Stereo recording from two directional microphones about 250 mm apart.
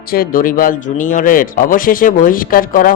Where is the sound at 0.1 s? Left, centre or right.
Left.